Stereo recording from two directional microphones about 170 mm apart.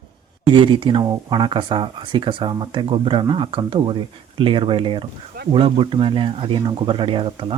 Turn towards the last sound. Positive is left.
turn(degrees=-30)  # may be behind; listen again after turning